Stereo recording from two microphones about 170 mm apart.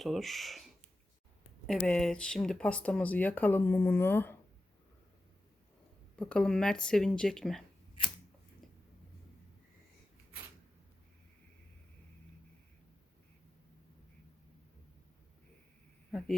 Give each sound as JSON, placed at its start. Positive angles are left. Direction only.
{"t": 0.0, "sound": "speech", "side_deg": 0}
{"t": 6.1, "sound": "speech", "side_deg": 5}